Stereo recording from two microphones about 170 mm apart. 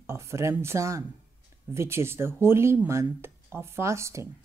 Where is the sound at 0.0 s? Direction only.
15° right (ahead or behind).